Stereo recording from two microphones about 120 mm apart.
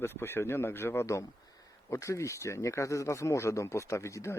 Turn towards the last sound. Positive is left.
turn(degrees=25)  # may be behind; listen again after turning